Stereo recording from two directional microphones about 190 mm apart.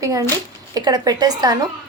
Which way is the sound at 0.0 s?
15° right (ahead or behind).